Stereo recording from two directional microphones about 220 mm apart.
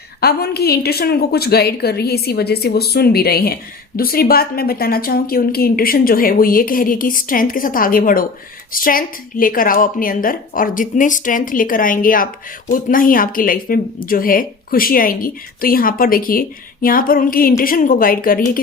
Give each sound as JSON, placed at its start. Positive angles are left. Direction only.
{"t": 0.2, "sound": "a woman's voice", "side_deg": 45}